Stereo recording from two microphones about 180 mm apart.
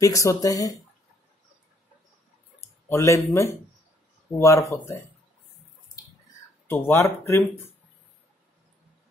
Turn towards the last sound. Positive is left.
turn(degrees=15)  # may be behind; listen again after turning